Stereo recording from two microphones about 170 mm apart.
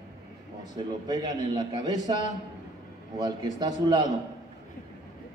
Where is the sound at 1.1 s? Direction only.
25° right (ahead or behind).